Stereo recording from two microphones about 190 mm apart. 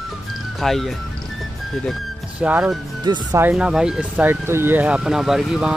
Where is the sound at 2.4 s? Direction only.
5° right (ahead or behind).